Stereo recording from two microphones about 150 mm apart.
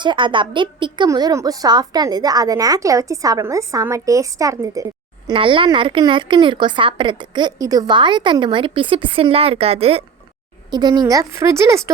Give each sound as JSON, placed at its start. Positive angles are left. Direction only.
{"t": 0.0, "sound": "a woman's voice", "side_deg": -30}
{"t": 5.3, "sound": "a woman's voice", "side_deg": -35}
{"t": 10.7, "sound": "a woman's voice", "side_deg": -30}